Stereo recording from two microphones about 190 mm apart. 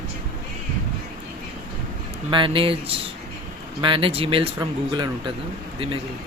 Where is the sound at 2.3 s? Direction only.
25° right (ahead or behind).